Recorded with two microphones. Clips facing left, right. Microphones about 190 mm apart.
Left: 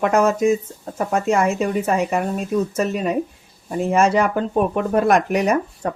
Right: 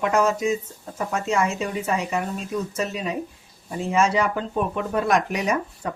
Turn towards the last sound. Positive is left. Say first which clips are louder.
# left 5 dB
turn(degrees=55)  # may be behind; listen again after turning